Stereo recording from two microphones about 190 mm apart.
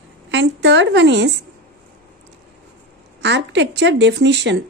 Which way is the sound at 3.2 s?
65° right (ahead or behind).